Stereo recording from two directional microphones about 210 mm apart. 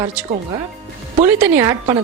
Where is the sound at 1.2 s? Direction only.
10° right (ahead or behind).